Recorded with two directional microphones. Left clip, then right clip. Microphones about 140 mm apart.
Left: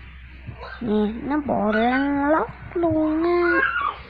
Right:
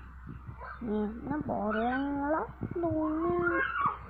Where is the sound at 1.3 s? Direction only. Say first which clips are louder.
Left 10 dB; 50° left (ahead or behind).